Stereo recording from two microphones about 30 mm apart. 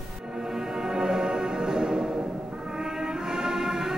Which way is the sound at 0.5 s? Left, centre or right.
Right.